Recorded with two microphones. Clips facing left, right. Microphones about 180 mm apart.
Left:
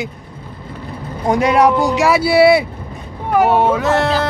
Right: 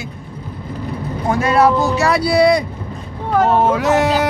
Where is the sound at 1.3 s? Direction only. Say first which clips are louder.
Left 1 dB; 15° left (ahead or behind).